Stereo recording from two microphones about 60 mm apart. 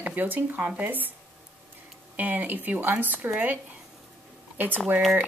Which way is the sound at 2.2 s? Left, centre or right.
Right.